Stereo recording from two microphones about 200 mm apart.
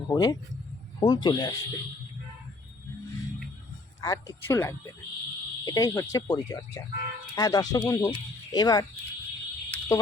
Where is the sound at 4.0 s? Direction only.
15° left (ahead or behind).